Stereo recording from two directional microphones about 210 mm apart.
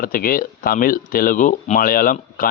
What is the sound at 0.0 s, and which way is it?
A man's voice, 45° left (ahead or behind).